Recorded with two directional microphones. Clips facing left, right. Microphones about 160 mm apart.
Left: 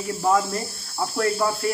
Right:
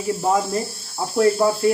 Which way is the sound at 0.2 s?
20° right (ahead or behind).